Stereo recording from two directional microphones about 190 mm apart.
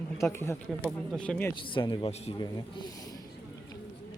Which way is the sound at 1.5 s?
25° left (ahead or behind).